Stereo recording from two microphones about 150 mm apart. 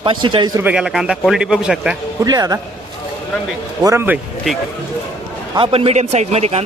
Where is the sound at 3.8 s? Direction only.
20° right (ahead or behind).